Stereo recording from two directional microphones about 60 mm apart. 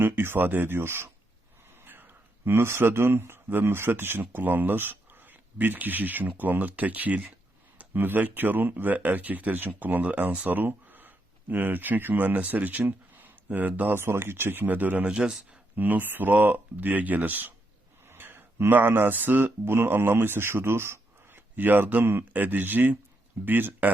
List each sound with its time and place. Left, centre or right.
0.0 s speech: right
14.0 s speech: right
15.1 s speech: centre
15.7 s speech: right
18.1 s speech: right